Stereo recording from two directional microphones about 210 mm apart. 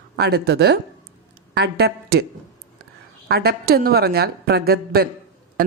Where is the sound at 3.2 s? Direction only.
50° right (ahead or behind).